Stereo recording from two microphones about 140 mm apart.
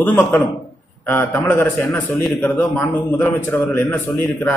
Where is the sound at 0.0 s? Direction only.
10° left (ahead or behind).